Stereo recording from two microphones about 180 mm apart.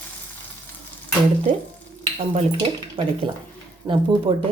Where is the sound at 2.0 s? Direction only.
30° right (ahead or behind).